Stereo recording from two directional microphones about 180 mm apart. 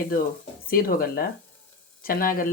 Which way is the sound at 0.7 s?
55° left (ahead or behind).